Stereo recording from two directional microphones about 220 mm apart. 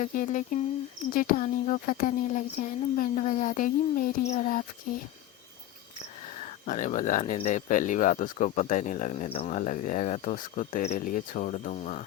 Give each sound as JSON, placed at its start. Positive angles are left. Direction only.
{"t": 0.0, "sound": "speech", "side_deg": 35}
{"t": 6.7, "sound": "speech", "side_deg": 35}